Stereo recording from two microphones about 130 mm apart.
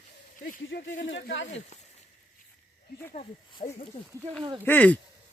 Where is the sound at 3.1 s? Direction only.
65° left (ahead or behind).